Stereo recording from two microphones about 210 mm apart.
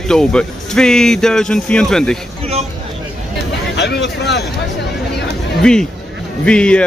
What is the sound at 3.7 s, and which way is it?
Speech, 55° left (ahead or behind).